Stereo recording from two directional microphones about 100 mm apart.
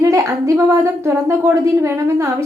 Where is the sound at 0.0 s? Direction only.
30° right (ahead or behind).